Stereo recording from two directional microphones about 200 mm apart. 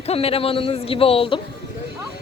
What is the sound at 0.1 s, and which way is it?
A man's voice, 30° left (ahead or behind).